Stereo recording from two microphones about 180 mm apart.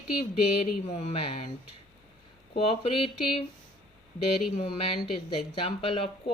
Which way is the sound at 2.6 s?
30° left (ahead or behind).